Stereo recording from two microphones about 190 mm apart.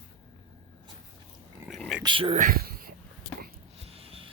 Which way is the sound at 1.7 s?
Centre (ahead or behind).